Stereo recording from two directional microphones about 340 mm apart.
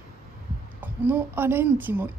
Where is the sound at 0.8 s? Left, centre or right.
Centre.